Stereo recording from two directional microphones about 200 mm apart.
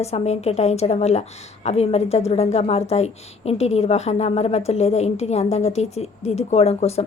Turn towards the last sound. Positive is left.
turn(degrees=30)  # may be behind; listen again after turning